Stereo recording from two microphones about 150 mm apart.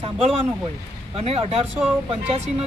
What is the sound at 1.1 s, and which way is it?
Speech, 40° right (ahead or behind).